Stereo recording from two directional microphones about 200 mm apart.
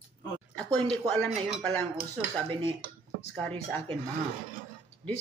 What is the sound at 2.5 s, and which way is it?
Speech, 25° right (ahead or behind).